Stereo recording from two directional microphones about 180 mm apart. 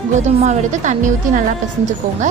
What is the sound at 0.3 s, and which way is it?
A woman's voice, 40° right (ahead or behind).